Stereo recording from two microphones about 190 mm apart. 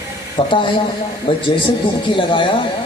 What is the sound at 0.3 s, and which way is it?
A man's voice, 25° left (ahead or behind).